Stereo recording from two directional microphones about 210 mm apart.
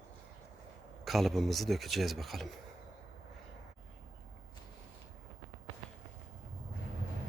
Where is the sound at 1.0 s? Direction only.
Centre (ahead or behind).